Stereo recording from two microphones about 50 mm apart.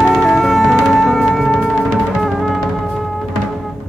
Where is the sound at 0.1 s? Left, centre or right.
Centre.